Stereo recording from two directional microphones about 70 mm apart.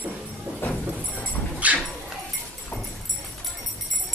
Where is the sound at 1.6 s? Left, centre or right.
Right.